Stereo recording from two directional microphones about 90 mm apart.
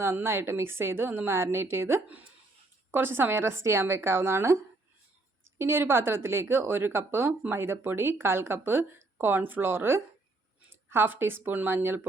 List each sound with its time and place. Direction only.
0.0 s speech: 25° right (ahead or behind)
5.5 s speech: 25° right (ahead or behind)